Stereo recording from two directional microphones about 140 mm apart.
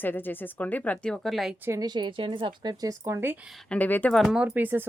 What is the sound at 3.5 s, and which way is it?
Speech, 5° left (ahead or behind).